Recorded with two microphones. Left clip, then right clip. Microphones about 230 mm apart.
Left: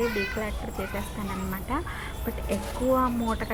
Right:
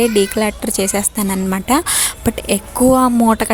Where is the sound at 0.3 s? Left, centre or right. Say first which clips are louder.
Right 15 dB; right.